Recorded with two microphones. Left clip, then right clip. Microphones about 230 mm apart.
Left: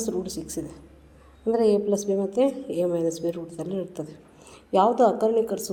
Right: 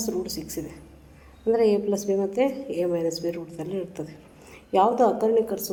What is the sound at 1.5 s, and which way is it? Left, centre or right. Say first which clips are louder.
Speech: even; left.